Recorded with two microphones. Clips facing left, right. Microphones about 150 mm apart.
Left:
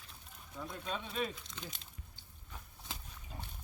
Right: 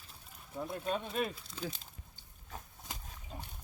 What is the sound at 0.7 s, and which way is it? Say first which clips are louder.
Speech: right 5 dB; 50° right (ahead or behind).